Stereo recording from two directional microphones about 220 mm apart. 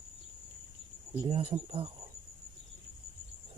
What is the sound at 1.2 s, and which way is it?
Speech, 25° right (ahead or behind).